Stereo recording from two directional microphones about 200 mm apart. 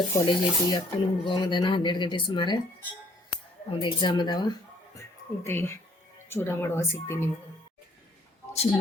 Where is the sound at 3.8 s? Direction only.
20° left (ahead or behind).